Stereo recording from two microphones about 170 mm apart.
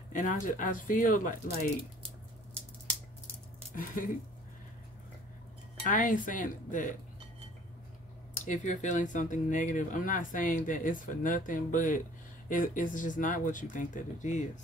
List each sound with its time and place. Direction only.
0.1 s speech: 50° left (ahead or behind)
3.7 s speech: 55° left (ahead or behind)
5.9 s speech: 50° left (ahead or behind)
8.5 s speech: 45° left (ahead or behind)